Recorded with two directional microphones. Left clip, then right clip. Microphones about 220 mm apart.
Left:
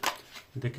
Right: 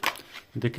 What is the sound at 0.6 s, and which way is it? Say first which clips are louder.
Speech: right 8 dB; 40° right (ahead or behind).